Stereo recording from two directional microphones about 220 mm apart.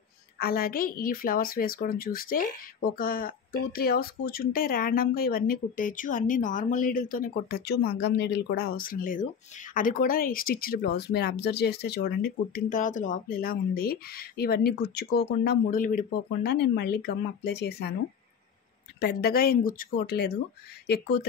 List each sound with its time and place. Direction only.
0.4 s speech: 45° left (ahead or behind)
18.9 s speech: 45° left (ahead or behind)